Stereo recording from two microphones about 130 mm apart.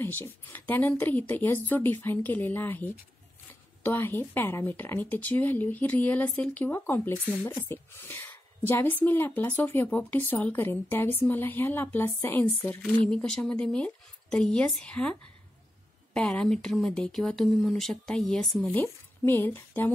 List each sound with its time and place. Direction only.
0.0 s a woman's voice: 15° left (ahead or behind)